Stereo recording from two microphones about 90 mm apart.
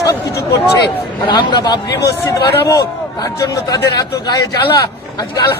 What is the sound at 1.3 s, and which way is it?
Speech, 55° left (ahead or behind).